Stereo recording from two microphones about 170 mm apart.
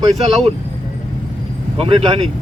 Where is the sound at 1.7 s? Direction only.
30° right (ahead or behind).